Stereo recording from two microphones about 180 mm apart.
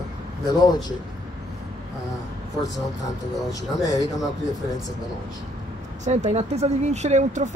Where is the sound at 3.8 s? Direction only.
20° left (ahead or behind).